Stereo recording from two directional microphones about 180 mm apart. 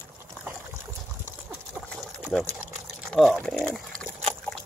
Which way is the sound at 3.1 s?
5° left (ahead or behind).